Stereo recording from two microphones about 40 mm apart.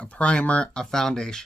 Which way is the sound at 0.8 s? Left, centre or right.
Centre.